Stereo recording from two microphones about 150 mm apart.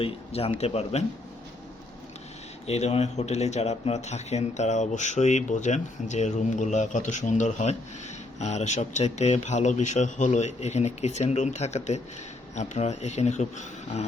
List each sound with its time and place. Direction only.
0.0 s speech: 40° left (ahead or behind)
2.6 s speech: 45° left (ahead or behind)